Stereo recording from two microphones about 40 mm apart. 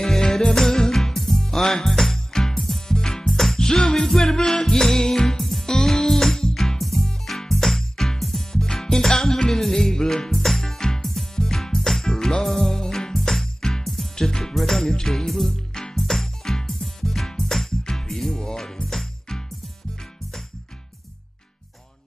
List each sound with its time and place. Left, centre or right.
0.0 s music: centre
3.5 s music: centre
5.4 s music: centre
10.3 s music: centre
18.4 s music: centre